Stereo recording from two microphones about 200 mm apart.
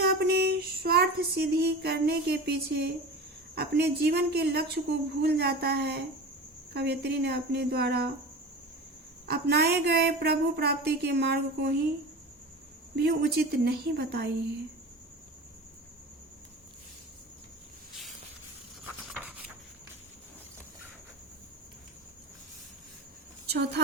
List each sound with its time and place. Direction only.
0.0 s a sound: 50° right (ahead or behind)
3.5 s speech: 55° right (ahead or behind)
9.2 s speech: 50° right (ahead or behind)
13.0 s speech: 55° right (ahead or behind)
23.5 s speech: 55° right (ahead or behind)